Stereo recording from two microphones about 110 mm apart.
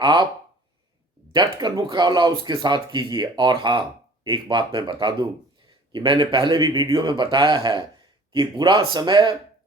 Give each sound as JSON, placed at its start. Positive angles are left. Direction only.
{"t": 0.0, "sound": "speech", "side_deg": -45}
{"t": 1.3, "sound": "speech", "side_deg": -45}